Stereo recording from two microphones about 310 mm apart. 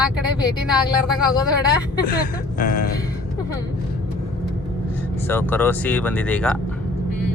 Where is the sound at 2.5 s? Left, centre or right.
Left.